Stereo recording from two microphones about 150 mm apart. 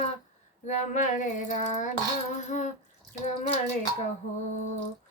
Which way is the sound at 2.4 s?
50° left (ahead or behind).